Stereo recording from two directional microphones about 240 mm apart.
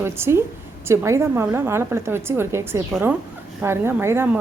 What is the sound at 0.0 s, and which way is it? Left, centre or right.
Speech, centre.